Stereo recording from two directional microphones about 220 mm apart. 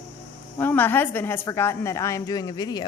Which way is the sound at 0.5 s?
10° left (ahead or behind).